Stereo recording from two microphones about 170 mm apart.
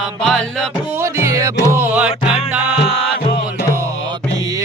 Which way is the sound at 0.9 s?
15° right (ahead or behind).